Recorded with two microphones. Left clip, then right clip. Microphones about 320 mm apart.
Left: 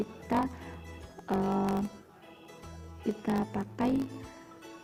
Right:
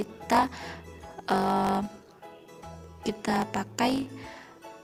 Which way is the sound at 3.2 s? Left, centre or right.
Right.